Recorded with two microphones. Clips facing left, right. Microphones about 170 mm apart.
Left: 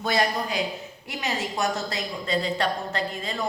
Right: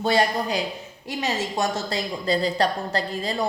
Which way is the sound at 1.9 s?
35° right (ahead or behind).